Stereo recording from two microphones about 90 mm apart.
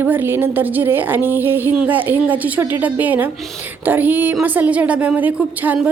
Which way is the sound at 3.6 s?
20° right (ahead or behind).